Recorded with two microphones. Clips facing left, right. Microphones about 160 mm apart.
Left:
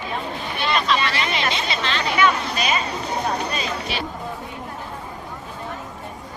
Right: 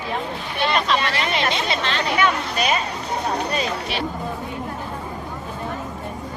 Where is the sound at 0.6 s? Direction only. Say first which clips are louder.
Right 1 dB; 55° right (ahead or behind).